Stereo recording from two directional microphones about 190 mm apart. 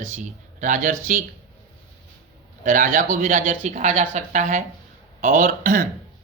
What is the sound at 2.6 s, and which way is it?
Speech, 45° right (ahead or behind).